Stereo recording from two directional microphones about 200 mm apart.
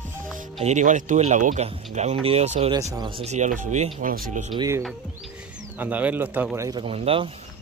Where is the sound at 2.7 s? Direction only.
20° right (ahead or behind); by 4.5 s 40° right (ahead or behind).